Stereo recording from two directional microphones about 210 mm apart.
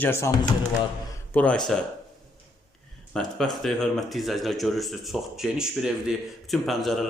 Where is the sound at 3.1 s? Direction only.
5° left (ahead or behind).